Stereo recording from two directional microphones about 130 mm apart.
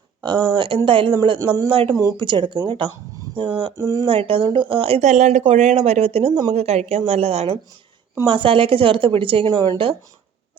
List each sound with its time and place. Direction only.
0.2 s speech: 30° right (ahead or behind)
2.0 s speech: 25° right (ahead or behind)
2.2 s speech: 40° right (ahead or behind)
3.8 s speech: 25° right (ahead or behind)
4.0 s speech: 45° right (ahead or behind)
5.0 s speech: 65° right (ahead or behind); by 9.9 s 40° right (ahead or behind)